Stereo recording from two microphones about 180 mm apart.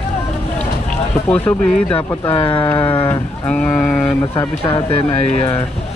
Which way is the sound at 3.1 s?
10° left (ahead or behind).